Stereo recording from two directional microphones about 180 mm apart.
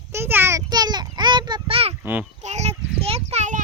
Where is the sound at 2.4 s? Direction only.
40° right (ahead or behind).